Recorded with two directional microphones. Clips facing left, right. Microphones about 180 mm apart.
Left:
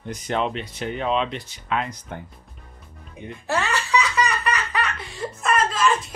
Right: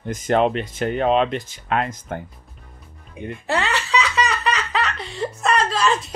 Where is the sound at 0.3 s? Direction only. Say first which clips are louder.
Right 7 dB; 50° right (ahead or behind).